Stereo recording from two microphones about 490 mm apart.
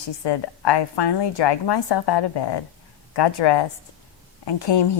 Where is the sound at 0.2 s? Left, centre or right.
Left.